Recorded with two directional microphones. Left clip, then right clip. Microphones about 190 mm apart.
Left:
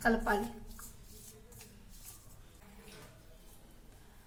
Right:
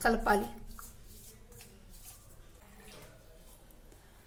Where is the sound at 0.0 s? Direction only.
50° right (ahead or behind).